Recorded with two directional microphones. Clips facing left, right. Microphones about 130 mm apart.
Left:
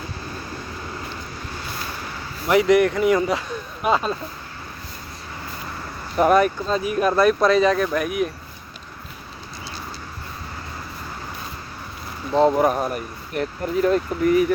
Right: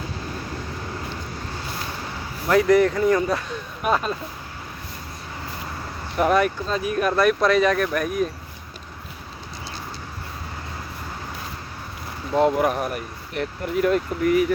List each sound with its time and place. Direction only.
2.5 s speech: 15° left (ahead or behind)
6.1 s speech: 40° left (ahead or behind)
7.9 s speech: 10° left (ahead or behind)
12.3 s speech: 30° left (ahead or behind)